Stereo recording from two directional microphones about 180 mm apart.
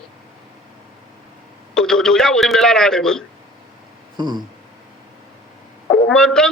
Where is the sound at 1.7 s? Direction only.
5° left (ahead or behind).